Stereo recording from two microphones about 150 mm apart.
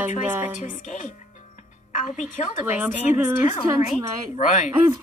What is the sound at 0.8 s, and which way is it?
A woman's voice, 60° left (ahead or behind).